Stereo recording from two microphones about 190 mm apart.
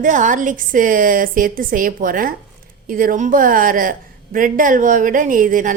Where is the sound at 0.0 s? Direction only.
40° right (ahead or behind).